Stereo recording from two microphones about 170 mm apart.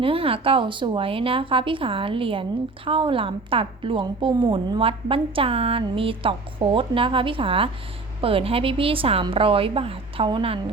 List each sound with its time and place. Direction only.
0.0 s a woman's voice: 35° right (ahead or behind)